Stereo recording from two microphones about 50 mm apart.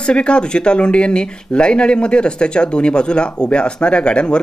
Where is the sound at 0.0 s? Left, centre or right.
Centre.